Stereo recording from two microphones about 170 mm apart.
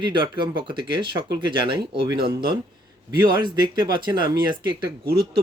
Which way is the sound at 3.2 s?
25° right (ahead or behind).